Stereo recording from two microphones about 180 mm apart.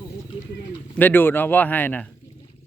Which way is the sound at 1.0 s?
10° left (ahead or behind).